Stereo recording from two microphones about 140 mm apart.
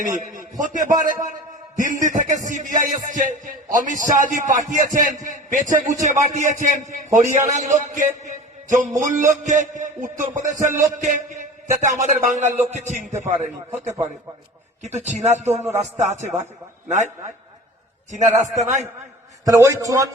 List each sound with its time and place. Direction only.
0.0 s music: 65° right (ahead or behind)
0.6 s a man's voice: 65° right (ahead or behind)
1.7 s music: 65° right (ahead or behind)
5.5 s a man's voice: 70° right (ahead or behind)
6.0 s music: 60° right (ahead or behind)
13.7 s a man's voice: 20° right (ahead or behind)
14.8 s a man's voice: 55° right (ahead or behind)
15.8 s music: 55° right (ahead or behind)
18.1 s music: 60° right (ahead or behind)
19.5 s a man's voice: 20° right (ahead or behind)